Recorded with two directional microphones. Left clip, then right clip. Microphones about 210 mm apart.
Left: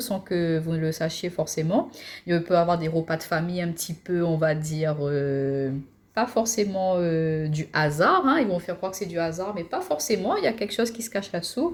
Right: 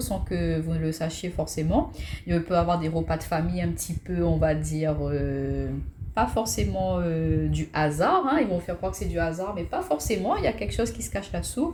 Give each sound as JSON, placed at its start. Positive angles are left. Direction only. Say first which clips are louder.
{"t": 0.1, "sound": "speech", "louder": "left 4 dB", "side_deg": 45}